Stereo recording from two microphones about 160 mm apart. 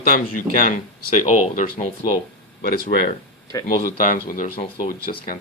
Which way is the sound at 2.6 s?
60° left (ahead or behind).